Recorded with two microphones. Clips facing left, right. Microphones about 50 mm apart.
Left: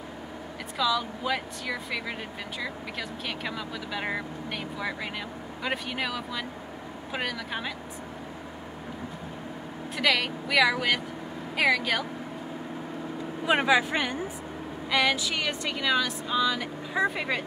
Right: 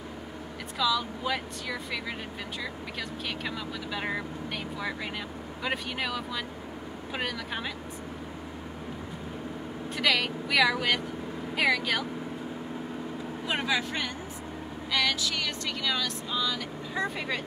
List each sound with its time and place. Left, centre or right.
0.7 s speech: centre
9.9 s speech: centre
13.5 s speech: left